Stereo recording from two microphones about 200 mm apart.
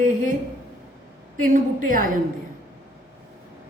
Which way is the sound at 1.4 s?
45° right (ahead or behind).